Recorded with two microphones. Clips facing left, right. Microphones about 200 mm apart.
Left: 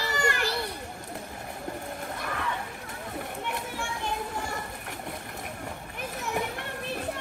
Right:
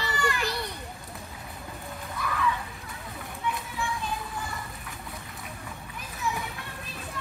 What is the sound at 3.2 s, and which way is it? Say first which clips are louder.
Children playing: right 1 dB; 65° left (ahead or behind).